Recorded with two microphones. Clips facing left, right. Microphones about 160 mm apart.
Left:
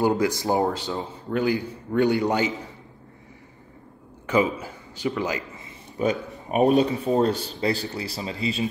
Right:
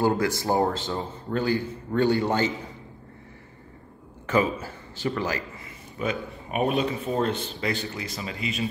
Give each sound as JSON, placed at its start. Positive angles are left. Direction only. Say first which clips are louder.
{"t": 0.0, "sound": "a man's voice", "louder": "left 2 dB", "side_deg": 15}
{"t": 4.3, "sound": "a man's voice", "louder": "left 1 dB", "side_deg": 15}
{"t": 5.9, "sound": "speech", "louder": "left 5 dB", "side_deg": 35}